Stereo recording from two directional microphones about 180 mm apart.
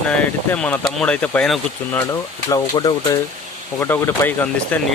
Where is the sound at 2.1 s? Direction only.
20° left (ahead or behind).